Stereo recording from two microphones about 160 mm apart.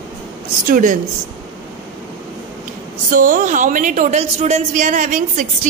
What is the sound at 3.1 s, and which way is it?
A woman's voice, 55° right (ahead or behind).